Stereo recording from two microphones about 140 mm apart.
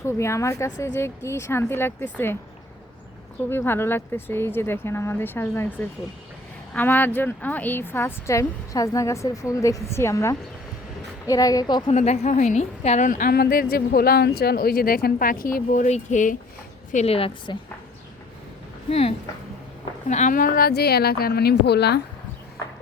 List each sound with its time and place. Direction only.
0.0 s speech: 20° left (ahead or behind)
3.5 s speech: 15° left (ahead or behind)
11.9 s a woman's voice: 50° left (ahead or behind)
13.1 s speech: 80° left; by 16.4 s 65° left (ahead or behind)
16.9 s a woman's voice: 50° left (ahead or behind)
18.9 s a woman's voice: 45° left (ahead or behind)
20.1 s speech: 60° left (ahead or behind); by 21.3 s 90° left